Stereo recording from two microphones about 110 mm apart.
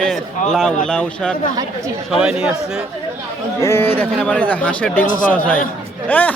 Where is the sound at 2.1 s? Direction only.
5° right (ahead or behind).